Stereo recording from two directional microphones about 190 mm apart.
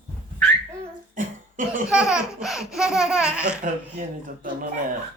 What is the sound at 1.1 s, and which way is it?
Cough, 45° right (ahead or behind).